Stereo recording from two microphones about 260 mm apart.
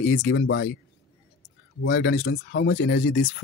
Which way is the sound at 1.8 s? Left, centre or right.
Left.